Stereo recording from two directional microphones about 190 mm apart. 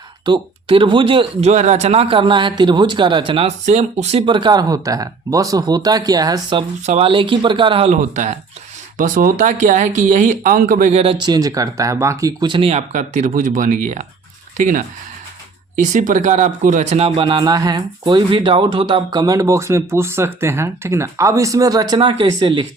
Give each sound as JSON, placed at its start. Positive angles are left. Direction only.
{"t": 0.3, "sound": "speech", "side_deg": -25}
{"t": 6.8, "sound": "speech", "side_deg": -35}